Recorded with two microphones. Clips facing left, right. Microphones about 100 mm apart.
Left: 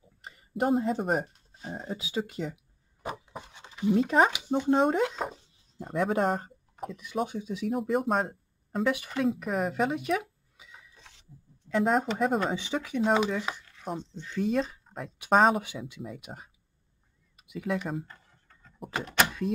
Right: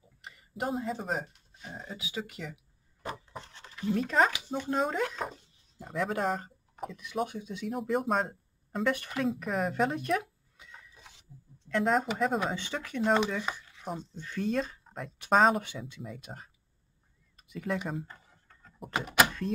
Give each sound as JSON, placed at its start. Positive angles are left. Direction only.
{"t": 0.2, "sound": "a sound", "side_deg": 35}
{"t": 0.7, "sound": "speech", "side_deg": 45}
{"t": 1.2, "sound": "speech", "side_deg": 35}
{"t": 3.0, "sound": "wood", "side_deg": 15}
{"t": 3.7, "sound": "speech", "side_deg": 20}
{"t": 7.3, "sound": "speech", "side_deg": 0}
{"t": 11.0, "sound": "a sound", "side_deg": -10}
{"t": 11.7, "sound": "speech", "side_deg": 5}
{"t": 12.5, "sound": "speech", "side_deg": 15}
{"t": 13.7, "sound": "speech", "side_deg": -5}
{"t": 17.4, "sound": "a sound", "side_deg": 5}